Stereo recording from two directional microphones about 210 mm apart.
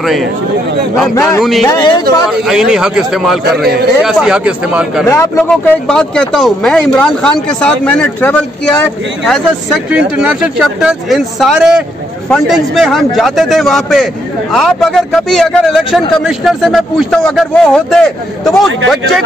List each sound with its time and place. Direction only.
0.0 s speech: centre (ahead or behind)
1.1 s speech: 15° left (ahead or behind)
1.4 s speech: centre (ahead or behind)
1.7 s speech: 20° left (ahead or behind)
2.2 s speech: 5° right (ahead or behind)
3.4 s a man's voice: 50° right (ahead or behind)
4.0 s speech: centre (ahead or behind)
5.0 s speech: 15° left (ahead or behind)